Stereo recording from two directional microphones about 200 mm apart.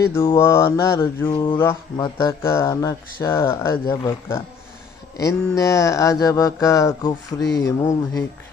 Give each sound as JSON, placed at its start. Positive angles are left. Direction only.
{"t": 0.0, "sound": "speech", "side_deg": 15}